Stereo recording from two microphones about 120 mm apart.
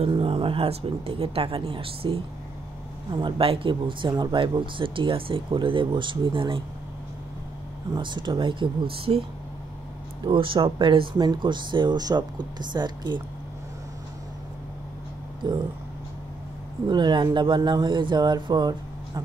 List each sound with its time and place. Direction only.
0.0 s speech: 50° right (ahead or behind)
7.9 s speech: 40° right (ahead or behind)
10.2 s speech: 45° right (ahead or behind)
15.4 s speech: 40° right (ahead or behind)
16.8 s speech: 40° right (ahead or behind)